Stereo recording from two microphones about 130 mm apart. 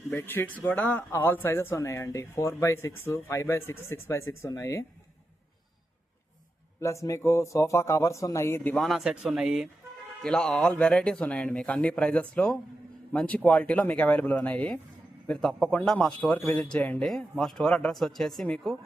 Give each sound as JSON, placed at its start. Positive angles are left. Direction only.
{"t": 0.1, "sound": "speech", "side_deg": 15}
{"t": 6.7, "sound": "speech", "side_deg": 25}
{"t": 8.8, "sound": "speech", "side_deg": 0}